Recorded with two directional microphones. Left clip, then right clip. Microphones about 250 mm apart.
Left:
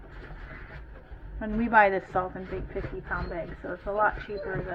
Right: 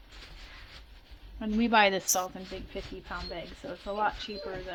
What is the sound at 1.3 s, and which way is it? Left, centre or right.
A woman's voice, right.